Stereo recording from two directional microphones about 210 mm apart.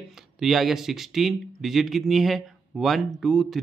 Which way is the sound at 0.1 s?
Centre (ahead or behind).